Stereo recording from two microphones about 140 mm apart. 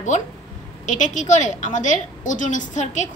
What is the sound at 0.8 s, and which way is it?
A woman's voice, 65° left (ahead or behind).